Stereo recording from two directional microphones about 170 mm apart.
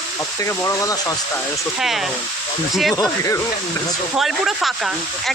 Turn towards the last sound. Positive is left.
turn(degrees=0)  # may be behind; listen again after turning